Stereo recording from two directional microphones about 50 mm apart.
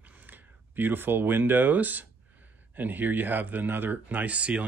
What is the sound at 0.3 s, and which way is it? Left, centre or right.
Speech, right.